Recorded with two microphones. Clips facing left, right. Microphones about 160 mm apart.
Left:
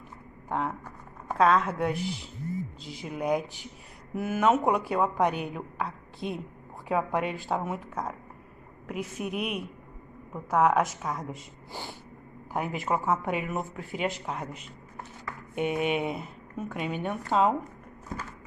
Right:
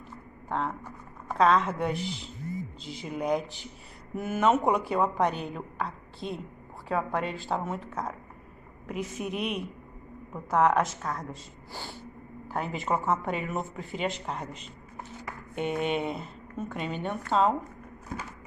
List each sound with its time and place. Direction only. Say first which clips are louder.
0.5 s a woman's voice: left 1 dB; 10° left (ahead or behind)
6.1 s a woman's voice: left 3 dB; 15° left (ahead or behind)
12.5 s a woman's voice: left 1 dB; 5° left (ahead or behind)